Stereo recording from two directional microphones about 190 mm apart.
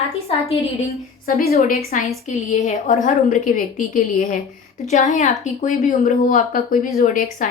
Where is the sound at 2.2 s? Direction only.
35° left (ahead or behind).